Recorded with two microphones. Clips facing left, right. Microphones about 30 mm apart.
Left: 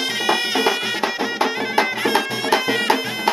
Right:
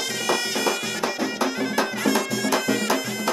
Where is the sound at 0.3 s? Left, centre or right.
Left.